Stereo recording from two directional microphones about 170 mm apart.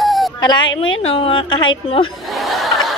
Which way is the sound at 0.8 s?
35° left (ahead or behind).